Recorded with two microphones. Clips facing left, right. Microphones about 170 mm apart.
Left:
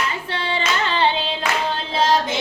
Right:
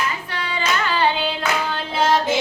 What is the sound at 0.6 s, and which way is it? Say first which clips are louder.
Hands: right 1 dB; 25° left (ahead or behind).